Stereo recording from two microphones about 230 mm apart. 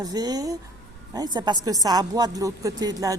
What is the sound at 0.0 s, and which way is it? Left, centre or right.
A woman's voice, centre.